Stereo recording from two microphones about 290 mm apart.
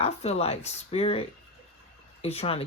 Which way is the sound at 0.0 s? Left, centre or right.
Left.